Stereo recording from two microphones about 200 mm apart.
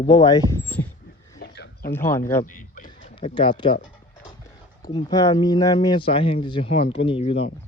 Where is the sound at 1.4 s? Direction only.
50° left (ahead or behind).